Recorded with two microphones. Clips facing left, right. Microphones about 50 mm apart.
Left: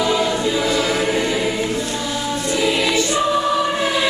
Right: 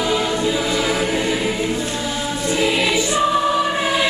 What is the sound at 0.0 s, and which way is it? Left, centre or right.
Choir, centre.